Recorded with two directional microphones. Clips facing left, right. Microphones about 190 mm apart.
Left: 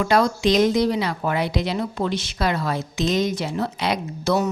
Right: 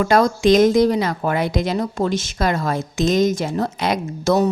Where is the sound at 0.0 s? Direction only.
45° right (ahead or behind).